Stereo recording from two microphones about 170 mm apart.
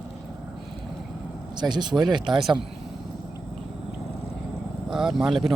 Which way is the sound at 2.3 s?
Centre (ahead or behind).